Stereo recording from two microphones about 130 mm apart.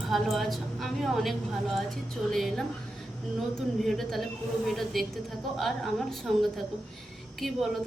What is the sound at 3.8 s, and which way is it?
Speech, centre (ahead or behind).